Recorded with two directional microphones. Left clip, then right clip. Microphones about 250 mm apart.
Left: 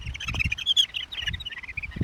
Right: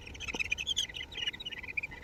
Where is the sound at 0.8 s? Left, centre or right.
Left.